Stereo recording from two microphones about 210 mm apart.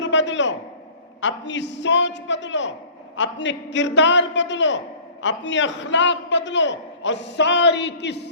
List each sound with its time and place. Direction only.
0.0 s a man's voice: 60° left (ahead or behind)